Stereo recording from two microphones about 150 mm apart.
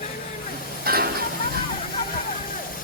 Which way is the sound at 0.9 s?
90° right.